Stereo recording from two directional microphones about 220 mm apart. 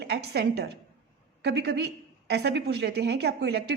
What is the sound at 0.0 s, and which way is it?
A woman's voice, 50° right (ahead or behind).